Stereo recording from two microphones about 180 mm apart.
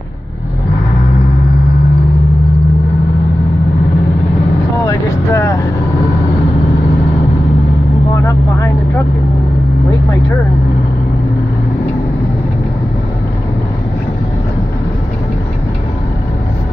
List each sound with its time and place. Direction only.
4.8 s vehicle: 20° left (ahead or behind)
8.1 s vehicle: 20° left (ahead or behind)